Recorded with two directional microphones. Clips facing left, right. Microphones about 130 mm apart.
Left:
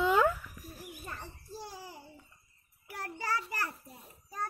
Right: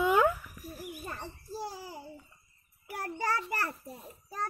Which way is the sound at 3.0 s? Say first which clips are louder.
Right 3 dB; 50° right (ahead or behind).